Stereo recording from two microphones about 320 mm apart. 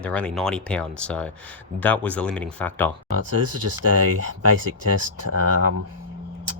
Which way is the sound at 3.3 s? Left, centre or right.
Right.